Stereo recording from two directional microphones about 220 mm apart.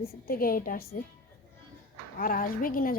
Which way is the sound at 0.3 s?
40° left (ahead or behind).